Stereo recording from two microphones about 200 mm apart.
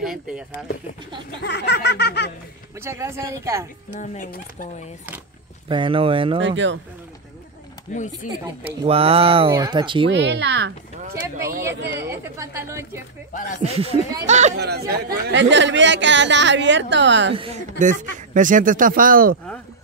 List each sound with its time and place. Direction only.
0.0 s speech: 5° right (ahead or behind)
1.4 s a sound: 55° left (ahead or behind)
2.8 s a woman's voice: 15° right (ahead or behind)
4.0 s speech: 40° left (ahead or behind)
5.7 s speech: 25° right (ahead or behind)
6.4 s speech: 65° right (ahead or behind)
7.9 s speech: 40° left (ahead or behind)
8.3 s speech: 30° right (ahead or behind)
10.1 s speech: 60° right (ahead or behind)
12.1 s a woman's voice: 15° right (ahead or behind)
13.6 s speech: 30° right (ahead or behind)
14.6 s speech: 55° right (ahead or behind)
17.3 s speech: 30° right (ahead or behind); by 19.3 s 45° right (ahead or behind)